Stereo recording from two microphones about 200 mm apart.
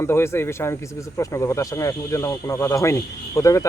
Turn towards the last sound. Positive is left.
turn(degrees=15)  # may be behind; listen again after turning